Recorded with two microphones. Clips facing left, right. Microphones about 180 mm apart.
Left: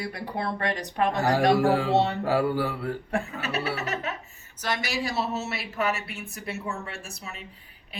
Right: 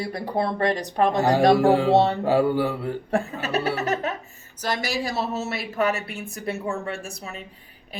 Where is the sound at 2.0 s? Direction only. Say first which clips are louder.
Right 4 dB; 30° right (ahead or behind).